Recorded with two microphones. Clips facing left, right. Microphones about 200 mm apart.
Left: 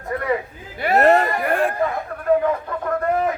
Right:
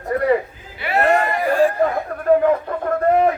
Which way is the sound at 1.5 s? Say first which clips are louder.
Right 4 dB; 60° left (ahead or behind).